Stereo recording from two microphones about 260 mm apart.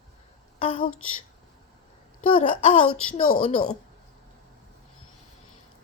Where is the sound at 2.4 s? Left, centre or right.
Left.